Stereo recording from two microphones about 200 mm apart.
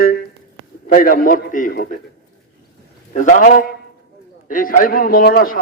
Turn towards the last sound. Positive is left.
turn(degrees=45)  # may be behind; listen again after turning